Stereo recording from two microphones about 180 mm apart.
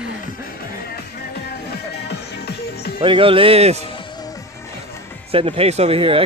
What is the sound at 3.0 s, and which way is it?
Speech, 30° right (ahead or behind).